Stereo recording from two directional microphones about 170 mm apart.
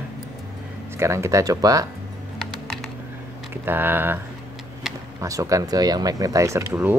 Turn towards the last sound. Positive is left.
turn(degrees=-10)  # may be behind; listen again after turning